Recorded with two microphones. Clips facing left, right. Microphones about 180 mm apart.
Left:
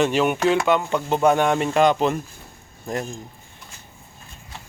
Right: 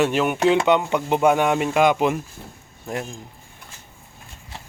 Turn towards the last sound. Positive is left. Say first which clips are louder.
# left 1 dB
turn(degrees=-5)  # may be behind; listen again after turning